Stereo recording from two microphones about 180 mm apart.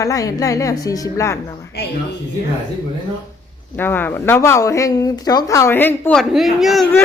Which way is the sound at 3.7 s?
10° left (ahead or behind).